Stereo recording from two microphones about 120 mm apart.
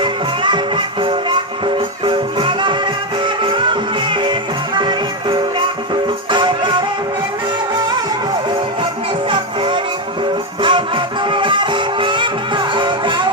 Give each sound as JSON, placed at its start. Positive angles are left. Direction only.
{"t": 0.0, "sound": "music", "side_deg": -40}
{"t": 9.3, "sound": "music", "side_deg": -40}